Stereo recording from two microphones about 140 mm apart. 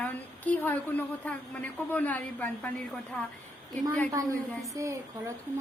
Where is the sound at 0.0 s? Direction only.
10° left (ahead or behind).